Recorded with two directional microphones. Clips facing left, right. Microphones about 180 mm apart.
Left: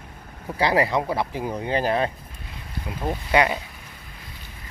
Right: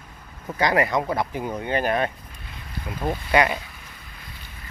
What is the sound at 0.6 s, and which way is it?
Speech, 30° left (ahead or behind).